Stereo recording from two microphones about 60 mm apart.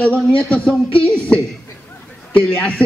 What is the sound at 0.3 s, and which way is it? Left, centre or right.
Speech, left.